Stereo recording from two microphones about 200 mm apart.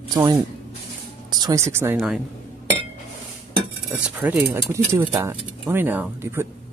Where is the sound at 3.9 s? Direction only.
5° right (ahead or behind).